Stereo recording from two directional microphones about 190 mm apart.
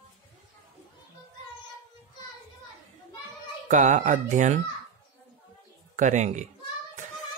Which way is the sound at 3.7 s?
40° right (ahead or behind).